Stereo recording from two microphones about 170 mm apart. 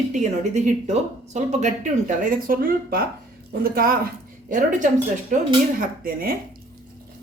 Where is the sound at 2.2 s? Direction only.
55° right (ahead or behind).